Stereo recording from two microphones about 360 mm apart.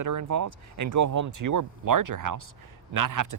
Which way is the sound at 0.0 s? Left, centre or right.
Right.